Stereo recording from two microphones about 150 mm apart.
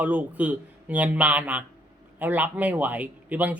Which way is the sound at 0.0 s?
10° right (ahead or behind).